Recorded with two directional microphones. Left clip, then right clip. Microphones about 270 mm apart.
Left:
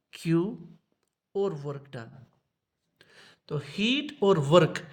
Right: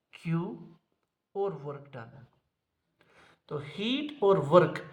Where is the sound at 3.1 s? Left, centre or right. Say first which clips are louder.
Left 2 dB; left.